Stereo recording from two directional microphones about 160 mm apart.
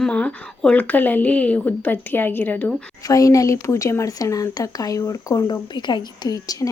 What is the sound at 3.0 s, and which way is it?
Speech, 20° left (ahead or behind).